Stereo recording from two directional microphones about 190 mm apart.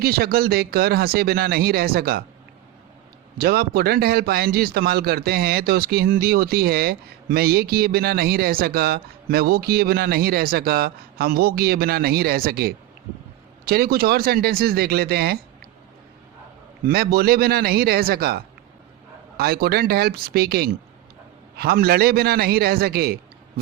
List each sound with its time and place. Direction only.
0.0 s speech: 55° right (ahead or behind)
3.3 s a man's voice: 55° right (ahead or behind)
16.8 s a man's voice: 55° right (ahead or behind)